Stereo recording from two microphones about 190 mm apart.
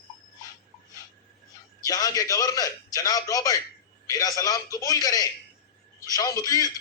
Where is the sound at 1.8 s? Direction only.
20° left (ahead or behind).